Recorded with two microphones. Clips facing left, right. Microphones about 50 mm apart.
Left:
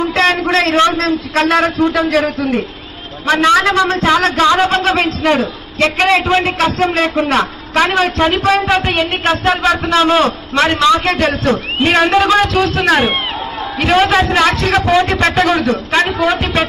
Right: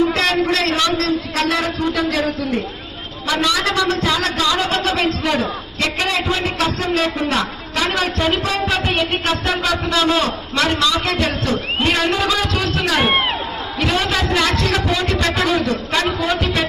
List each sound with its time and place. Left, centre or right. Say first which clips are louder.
0.1 s a man's voice: left 4 dB; left